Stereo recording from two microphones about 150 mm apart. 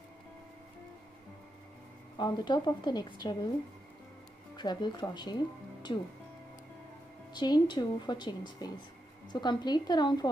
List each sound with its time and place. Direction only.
2.1 s a woman's voice: 30° left (ahead or behind)
4.6 s speech: 30° left (ahead or behind)
7.3 s a woman's voice: 30° left (ahead or behind)